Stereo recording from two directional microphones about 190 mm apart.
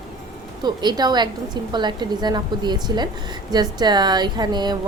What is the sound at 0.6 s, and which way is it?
Speech, 20° right (ahead or behind).